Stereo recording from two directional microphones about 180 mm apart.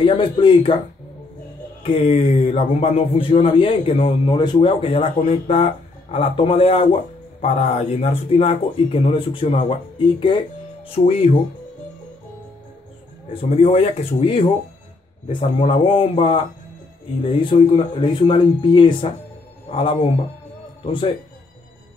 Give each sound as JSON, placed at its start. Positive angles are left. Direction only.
{"t": 0.0, "sound": "speech", "side_deg": 25}
{"t": 1.8, "sound": "a man's voice", "side_deg": 30}
{"t": 13.3, "sound": "a man's voice", "side_deg": 30}